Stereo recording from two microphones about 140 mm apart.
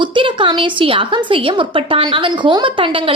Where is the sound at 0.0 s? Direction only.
35° right (ahead or behind).